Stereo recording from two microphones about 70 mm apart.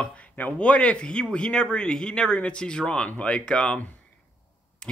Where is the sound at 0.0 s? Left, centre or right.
Centre.